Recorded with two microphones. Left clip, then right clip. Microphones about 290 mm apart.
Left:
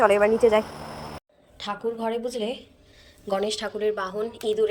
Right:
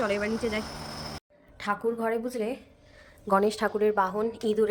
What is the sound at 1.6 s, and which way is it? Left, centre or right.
Speech, centre.